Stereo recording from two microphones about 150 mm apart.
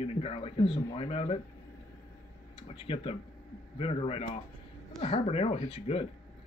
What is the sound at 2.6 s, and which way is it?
Speech, 35° left (ahead or behind).